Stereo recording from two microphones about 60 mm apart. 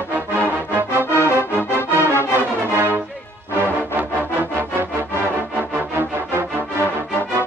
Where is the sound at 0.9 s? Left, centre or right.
Right.